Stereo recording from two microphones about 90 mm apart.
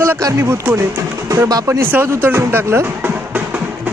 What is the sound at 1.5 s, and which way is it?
Speech, 40° right (ahead or behind).